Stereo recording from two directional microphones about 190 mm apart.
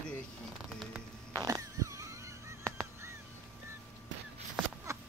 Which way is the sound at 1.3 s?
20° right (ahead or behind).